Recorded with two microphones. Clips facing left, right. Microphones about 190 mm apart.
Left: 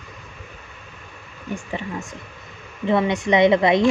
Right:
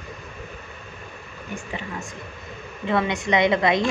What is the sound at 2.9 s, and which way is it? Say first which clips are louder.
A woman's voice: left 4 dB; 20° left (ahead or behind).